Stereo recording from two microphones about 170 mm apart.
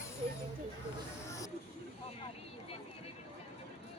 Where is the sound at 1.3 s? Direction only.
20° left (ahead or behind).